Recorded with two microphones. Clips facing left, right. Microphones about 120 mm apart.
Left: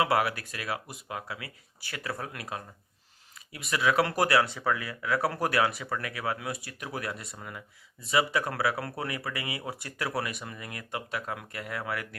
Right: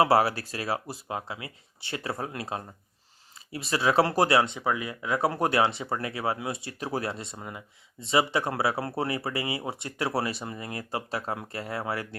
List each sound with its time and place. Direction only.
0.0 s speech: 30° right (ahead or behind)